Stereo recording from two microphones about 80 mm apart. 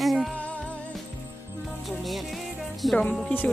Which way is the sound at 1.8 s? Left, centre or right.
Centre.